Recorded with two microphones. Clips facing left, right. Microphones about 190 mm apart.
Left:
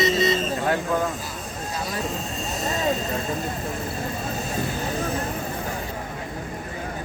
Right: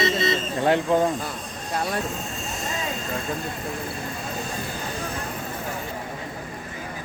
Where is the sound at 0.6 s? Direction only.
25° right (ahead or behind).